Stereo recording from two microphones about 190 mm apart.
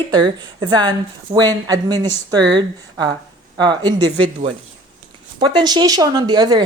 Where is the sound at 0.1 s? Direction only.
25° right (ahead or behind).